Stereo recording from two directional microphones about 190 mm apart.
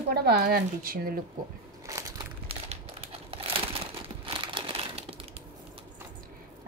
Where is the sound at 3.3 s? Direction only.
30° right (ahead or behind).